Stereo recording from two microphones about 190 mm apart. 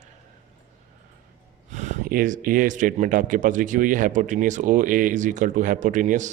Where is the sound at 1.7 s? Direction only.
40° right (ahead or behind).